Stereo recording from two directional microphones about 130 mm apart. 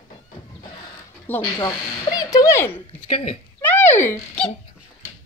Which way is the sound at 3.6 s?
15° left (ahead or behind).